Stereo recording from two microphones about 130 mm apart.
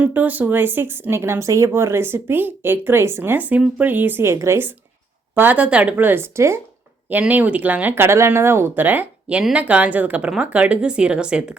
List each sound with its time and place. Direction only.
0.0 s speech: 10° right (ahead or behind)